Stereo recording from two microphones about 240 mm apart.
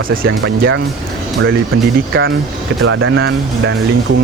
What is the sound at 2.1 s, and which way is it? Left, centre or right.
Speech, right.